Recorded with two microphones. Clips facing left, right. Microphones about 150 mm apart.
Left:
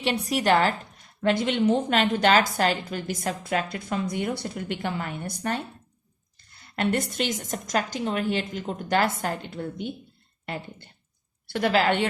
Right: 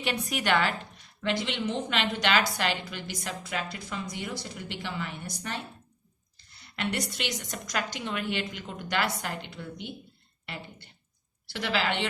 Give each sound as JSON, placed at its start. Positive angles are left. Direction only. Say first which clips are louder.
{"t": 0.0, "sound": "a woman's voice", "louder": "left 6 dB", "side_deg": 30}
{"t": 1.2, "sound": "speech", "louder": "left 7 dB", "side_deg": 50}